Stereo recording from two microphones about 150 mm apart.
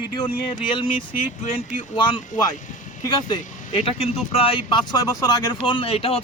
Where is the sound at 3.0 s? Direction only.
30° left (ahead or behind).